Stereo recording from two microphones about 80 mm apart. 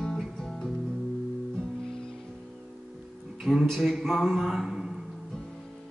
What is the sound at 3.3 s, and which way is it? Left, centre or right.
A man's voice, centre.